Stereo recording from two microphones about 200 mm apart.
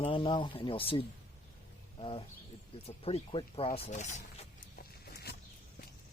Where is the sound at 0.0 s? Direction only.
25° left (ahead or behind).